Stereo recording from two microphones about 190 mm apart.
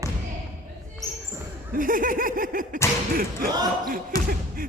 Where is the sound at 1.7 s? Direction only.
45° right (ahead or behind).